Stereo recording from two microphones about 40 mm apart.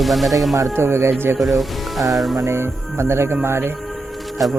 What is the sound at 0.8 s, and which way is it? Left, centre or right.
Speech, right.